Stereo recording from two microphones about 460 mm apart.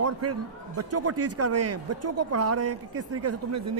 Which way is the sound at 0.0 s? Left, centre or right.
Right.